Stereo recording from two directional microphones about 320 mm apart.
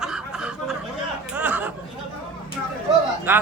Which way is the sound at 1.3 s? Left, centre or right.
Centre.